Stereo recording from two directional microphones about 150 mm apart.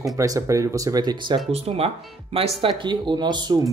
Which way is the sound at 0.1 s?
25° right (ahead or behind).